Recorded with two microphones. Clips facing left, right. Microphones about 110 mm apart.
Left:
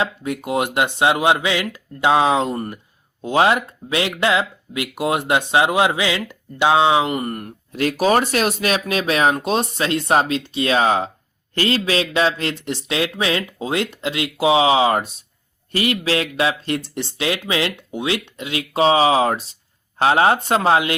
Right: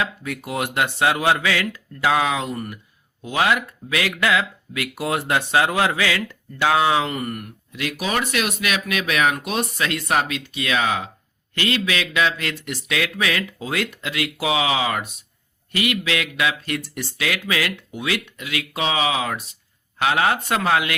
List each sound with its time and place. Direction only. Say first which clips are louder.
0.0 s speech: left 4 dB; 25° left (ahead or behind)